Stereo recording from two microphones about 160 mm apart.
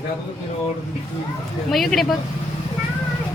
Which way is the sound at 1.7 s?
Centre (ahead or behind).